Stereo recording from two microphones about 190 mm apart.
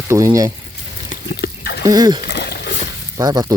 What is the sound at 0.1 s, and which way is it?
Speech, 15° right (ahead or behind).